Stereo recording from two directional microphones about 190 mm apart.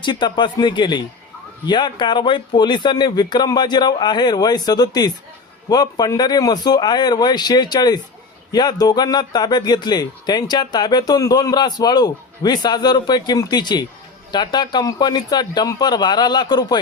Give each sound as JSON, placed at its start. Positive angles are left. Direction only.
{"t": 0.0, "sound": "speech", "side_deg": 25}